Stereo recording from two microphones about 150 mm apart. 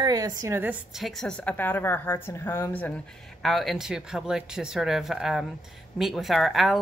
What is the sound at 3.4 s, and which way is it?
Speech, centre (ahead or behind).